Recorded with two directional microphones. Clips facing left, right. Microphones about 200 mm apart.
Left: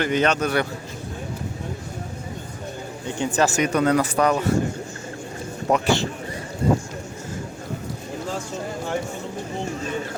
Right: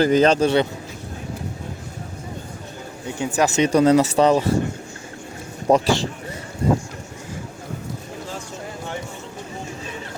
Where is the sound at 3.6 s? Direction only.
25° right (ahead or behind).